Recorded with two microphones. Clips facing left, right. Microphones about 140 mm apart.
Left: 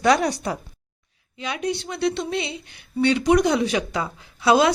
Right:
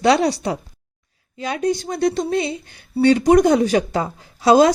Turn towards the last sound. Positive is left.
turn(degrees=-40)  # may be behind; listen again after turning